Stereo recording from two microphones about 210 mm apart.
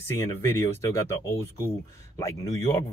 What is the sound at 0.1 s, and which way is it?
Speech, 15° left (ahead or behind).